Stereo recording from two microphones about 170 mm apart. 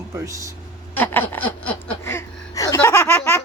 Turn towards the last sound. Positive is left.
turn(degrees=15)  # may be behind; listen again after turning